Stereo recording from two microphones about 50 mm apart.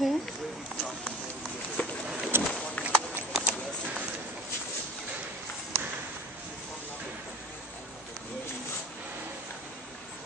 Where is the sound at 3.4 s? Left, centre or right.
Right.